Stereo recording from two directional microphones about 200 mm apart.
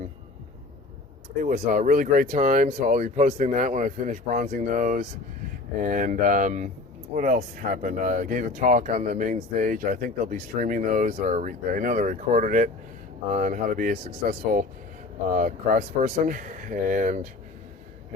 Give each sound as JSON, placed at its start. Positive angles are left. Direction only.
{"t": 1.4, "sound": "speech", "side_deg": -40}